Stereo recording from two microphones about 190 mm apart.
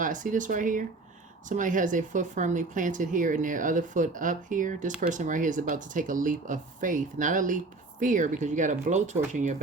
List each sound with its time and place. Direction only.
0.0 s speech: 45° right (ahead or behind)